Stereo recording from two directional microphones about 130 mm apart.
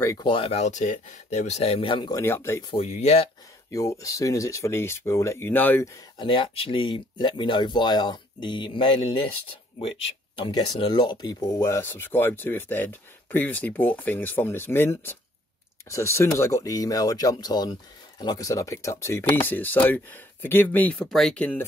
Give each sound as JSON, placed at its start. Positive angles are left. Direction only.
{"t": 0.2, "sound": "speech", "side_deg": 45}
{"t": 2.2, "sound": "speech", "side_deg": 20}
{"t": 2.7, "sound": "speech", "side_deg": 55}
{"t": 3.7, "sound": "speech", "side_deg": 25}
{"t": 6.1, "sound": "speech", "side_deg": 40}